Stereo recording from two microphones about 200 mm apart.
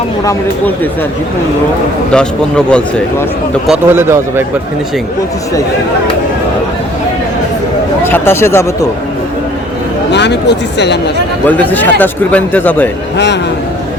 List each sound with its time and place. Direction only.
2.1 s a man's voice: 5° left (ahead or behind)
3.7 s a man's voice: 10° right (ahead or behind)
8.0 s speech: 10° left (ahead or behind)
10.1 s speech: 60° left (ahead or behind)
11.4 s speech: 10° left (ahead or behind)
13.1 s a man's voice: 60° left (ahead or behind)